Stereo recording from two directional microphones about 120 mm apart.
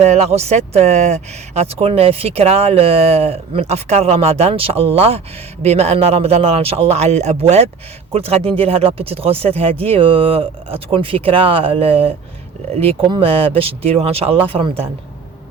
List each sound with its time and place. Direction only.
0.0 s speech: 65° right (ahead or behind)